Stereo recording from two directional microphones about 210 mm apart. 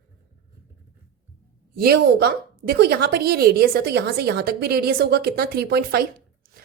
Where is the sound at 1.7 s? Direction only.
45° right (ahead or behind).